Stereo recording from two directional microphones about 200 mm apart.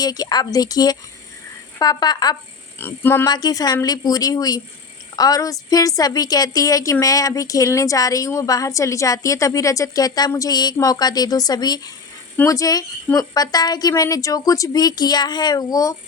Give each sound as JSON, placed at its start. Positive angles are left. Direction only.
{"t": 0.0, "sound": "a woman's voice", "side_deg": 20}